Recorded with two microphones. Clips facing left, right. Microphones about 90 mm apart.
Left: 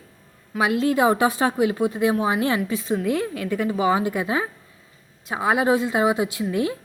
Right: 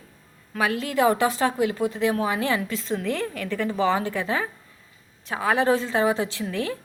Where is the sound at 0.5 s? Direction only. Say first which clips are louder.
Left 4 dB; 15° left (ahead or behind).